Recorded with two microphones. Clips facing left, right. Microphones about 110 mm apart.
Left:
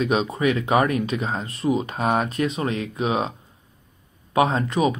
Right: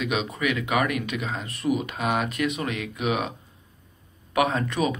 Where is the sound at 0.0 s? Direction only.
35° left (ahead or behind).